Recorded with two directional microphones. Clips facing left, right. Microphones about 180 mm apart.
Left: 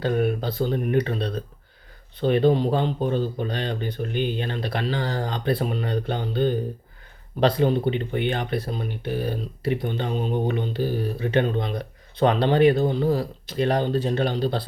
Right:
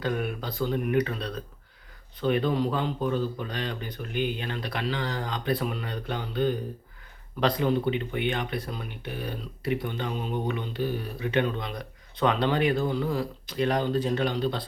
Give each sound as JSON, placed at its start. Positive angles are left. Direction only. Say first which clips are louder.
{"t": 0.0, "sound": "speech", "louder": "left 7 dB", "side_deg": 35}